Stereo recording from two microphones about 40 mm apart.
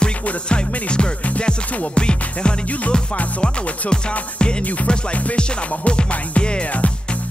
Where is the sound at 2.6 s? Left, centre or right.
Left.